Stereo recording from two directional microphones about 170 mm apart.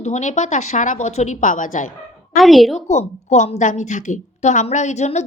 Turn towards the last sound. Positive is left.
turn(degrees=40)  # may be behind; listen again after turning